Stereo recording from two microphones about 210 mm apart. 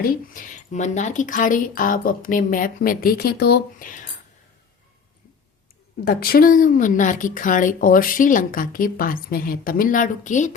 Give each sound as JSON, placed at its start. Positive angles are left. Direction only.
{"t": 0.0, "sound": "a woman's voice", "side_deg": 40}
{"t": 6.1, "sound": "a woman's voice", "side_deg": 45}